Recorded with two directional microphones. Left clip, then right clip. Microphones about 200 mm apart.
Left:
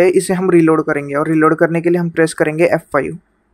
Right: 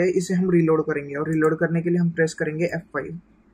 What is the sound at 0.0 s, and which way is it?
Speech, 55° left (ahead or behind).